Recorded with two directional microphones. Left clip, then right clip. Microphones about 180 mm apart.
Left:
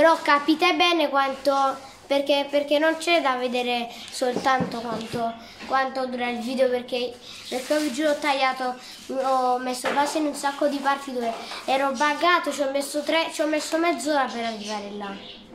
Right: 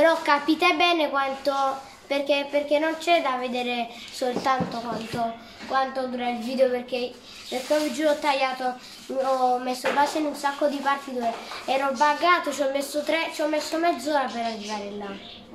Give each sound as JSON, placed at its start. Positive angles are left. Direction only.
{"t": 0.0, "sound": "a child's voice", "side_deg": 15}
{"t": 5.1, "sound": "a child's voice", "side_deg": 25}